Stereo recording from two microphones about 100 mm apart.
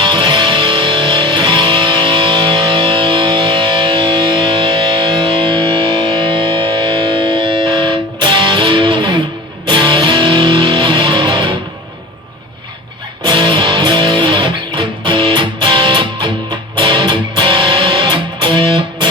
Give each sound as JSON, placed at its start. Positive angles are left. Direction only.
{"t": 0.0, "sound": "music", "side_deg": -50}
{"t": 13.2, "sound": "music", "side_deg": -50}